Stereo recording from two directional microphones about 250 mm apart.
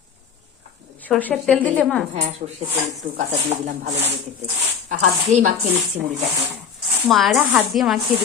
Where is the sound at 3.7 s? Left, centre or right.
Right.